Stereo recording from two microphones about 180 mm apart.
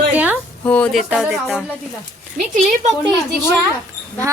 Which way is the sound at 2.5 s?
40° right (ahead or behind).